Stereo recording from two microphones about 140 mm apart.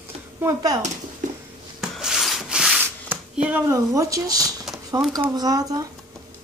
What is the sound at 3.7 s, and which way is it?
Speech, 25° right (ahead or behind).